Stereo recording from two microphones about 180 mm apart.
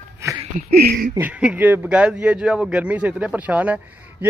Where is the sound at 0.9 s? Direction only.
60° right (ahead or behind).